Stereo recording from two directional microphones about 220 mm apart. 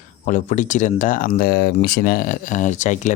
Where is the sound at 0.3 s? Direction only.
35° left (ahead or behind).